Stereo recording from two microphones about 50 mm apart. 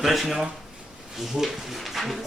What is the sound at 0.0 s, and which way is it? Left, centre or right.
Speech, centre.